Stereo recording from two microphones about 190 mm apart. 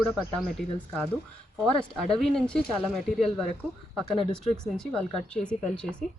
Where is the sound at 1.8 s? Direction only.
5° left (ahead or behind).